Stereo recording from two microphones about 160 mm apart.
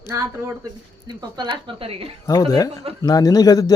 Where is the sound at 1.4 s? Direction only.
30° right (ahead or behind).